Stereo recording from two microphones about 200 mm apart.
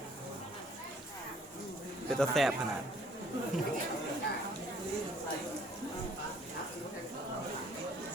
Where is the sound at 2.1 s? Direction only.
Centre (ahead or behind).